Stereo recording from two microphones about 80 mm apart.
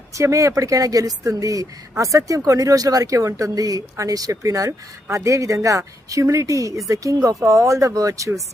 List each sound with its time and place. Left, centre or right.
0.1 s speech: right